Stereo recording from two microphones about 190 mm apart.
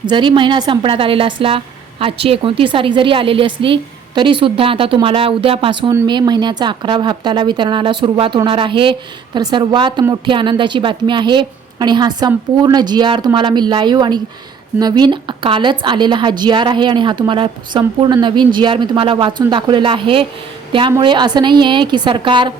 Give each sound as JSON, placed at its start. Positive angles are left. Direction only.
{"t": 0.1, "sound": "a woman's voice", "side_deg": -25}